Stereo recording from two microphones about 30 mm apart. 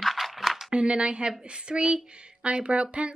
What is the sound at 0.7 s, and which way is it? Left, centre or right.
A woman's voice, right.